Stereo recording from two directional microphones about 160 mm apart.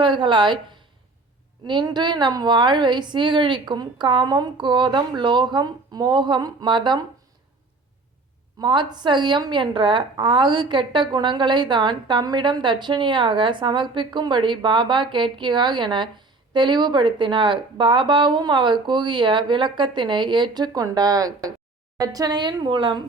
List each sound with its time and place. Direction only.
0.0 s a woman's voice: 30° right (ahead or behind)
8.6 s a woman's voice: 30° right (ahead or behind)